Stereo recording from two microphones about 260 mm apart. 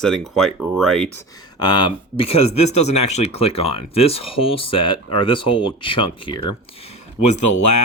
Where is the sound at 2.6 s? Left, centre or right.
Left.